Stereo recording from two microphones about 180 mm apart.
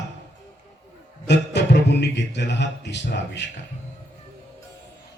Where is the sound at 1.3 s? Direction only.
70° left (ahead or behind).